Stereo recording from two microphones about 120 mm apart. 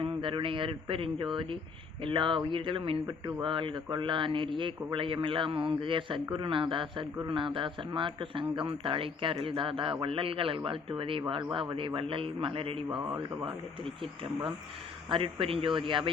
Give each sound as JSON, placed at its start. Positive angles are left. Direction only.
{"t": 0.0, "sound": "a man's voice", "side_deg": -45}
{"t": 12.9, "sound": "speech", "side_deg": -10}
{"t": 15.1, "sound": "a man's voice", "side_deg": -50}